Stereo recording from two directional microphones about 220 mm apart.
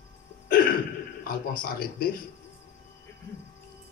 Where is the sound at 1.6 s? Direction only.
40° left (ahead or behind).